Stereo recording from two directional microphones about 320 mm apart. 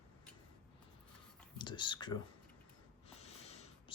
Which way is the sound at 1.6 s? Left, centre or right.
Centre.